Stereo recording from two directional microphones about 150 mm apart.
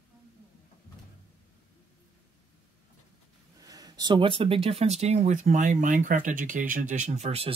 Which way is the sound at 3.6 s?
25° right (ahead or behind).